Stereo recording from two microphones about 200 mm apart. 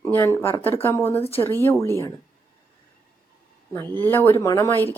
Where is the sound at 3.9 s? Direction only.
10° left (ahead or behind).